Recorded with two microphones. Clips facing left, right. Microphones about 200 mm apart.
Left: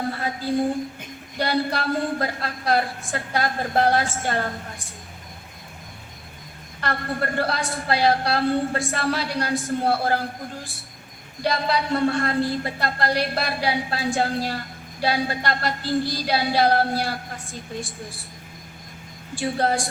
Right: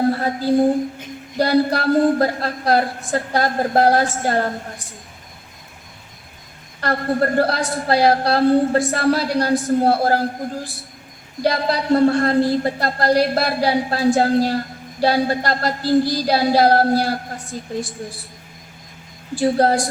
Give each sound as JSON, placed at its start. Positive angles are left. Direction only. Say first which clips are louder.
{"t": 0.1, "sound": "a sound", "louder": "right 7 dB", "side_deg": -40}
{"t": 1.4, "sound": "a woman's voice", "louder": "right 7 dB", "side_deg": -40}
{"t": 6.8, "sound": "a woman's voice", "louder": "right 7 dB", "side_deg": -40}
{"t": 19.4, "sound": "a woman's voice", "louder": "right 7 dB", "side_deg": -40}